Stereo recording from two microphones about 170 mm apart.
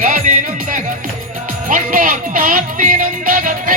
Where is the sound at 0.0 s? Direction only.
50° right (ahead or behind).